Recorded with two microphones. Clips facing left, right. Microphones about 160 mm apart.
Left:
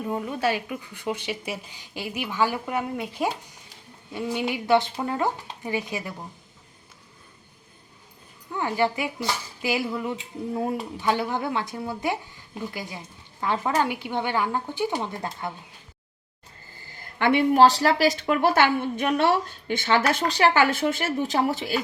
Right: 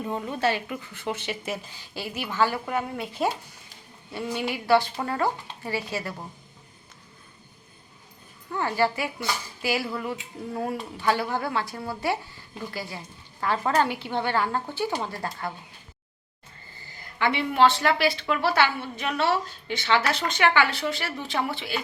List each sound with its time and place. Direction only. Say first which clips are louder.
0.0 s a woman's voice: left 1 dB; 10° left (ahead or behind)
8.4 s a woman's voice: even; 15° left (ahead or behind)
17.2 s a woman's voice: left 4 dB; 50° left (ahead or behind)